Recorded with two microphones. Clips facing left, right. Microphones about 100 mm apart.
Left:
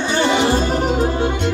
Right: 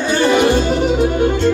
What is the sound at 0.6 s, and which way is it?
Music, 40° left (ahead or behind).